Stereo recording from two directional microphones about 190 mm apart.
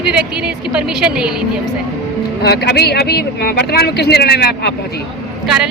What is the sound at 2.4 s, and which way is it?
Speech, 60° left (ahead or behind).